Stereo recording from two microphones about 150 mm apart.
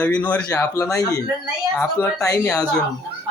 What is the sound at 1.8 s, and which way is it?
Speech, 15° left (ahead or behind).